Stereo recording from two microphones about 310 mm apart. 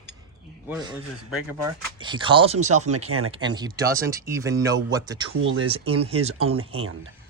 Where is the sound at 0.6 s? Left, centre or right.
Centre.